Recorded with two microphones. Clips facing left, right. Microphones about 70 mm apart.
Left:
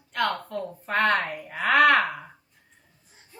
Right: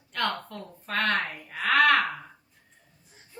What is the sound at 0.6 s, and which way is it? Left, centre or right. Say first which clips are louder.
Speech: left 4 dB; centre.